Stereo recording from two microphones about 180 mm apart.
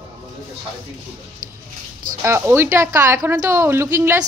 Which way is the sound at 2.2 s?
15° right (ahead or behind).